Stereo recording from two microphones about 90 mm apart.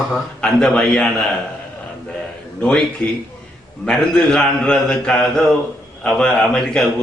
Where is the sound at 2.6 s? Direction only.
10° left (ahead or behind).